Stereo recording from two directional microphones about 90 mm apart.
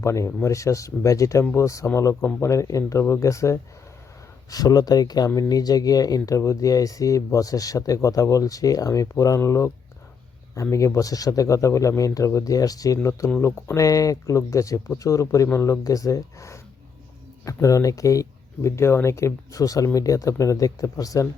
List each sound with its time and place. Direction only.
0.0 s speech: 35° left (ahead or behind)